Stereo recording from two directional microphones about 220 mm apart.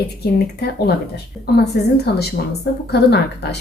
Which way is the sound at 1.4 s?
45° left (ahead or behind).